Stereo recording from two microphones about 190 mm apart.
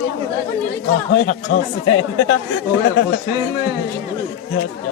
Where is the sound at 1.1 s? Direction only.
65° left (ahead or behind).